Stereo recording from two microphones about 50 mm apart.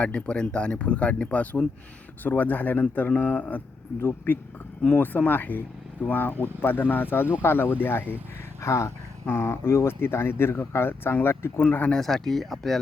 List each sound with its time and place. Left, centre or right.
0.0 s speech: left
4.9 s speech: left
8.6 s speech: left
9.2 s speech: left
11.6 s speech: left
11.9 s speech: centre